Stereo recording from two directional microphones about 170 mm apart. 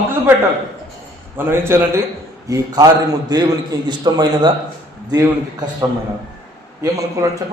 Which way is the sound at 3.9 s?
25° right (ahead or behind).